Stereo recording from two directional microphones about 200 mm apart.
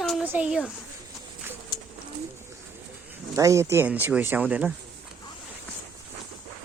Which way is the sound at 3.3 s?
15° right (ahead or behind).